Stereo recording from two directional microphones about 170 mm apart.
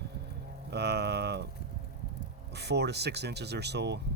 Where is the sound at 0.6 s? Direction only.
75° right (ahead or behind).